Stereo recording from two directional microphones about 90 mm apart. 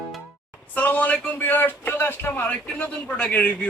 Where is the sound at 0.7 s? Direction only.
15° left (ahead or behind).